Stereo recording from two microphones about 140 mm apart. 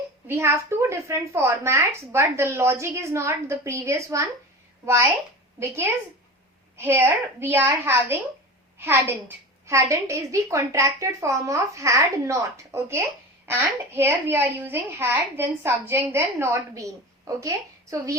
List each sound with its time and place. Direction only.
0.3 s a woman's voice: 20° right (ahead or behind)
5.5 s a woman's voice: 20° right (ahead or behind)